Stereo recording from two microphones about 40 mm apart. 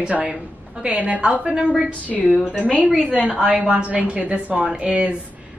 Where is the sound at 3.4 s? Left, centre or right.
Right.